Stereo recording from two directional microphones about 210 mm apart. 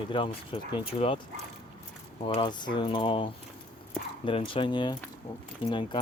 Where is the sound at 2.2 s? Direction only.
25° left (ahead or behind).